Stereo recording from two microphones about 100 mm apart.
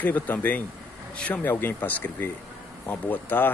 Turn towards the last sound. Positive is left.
turn(degrees=20)  # may be behind; listen again after turning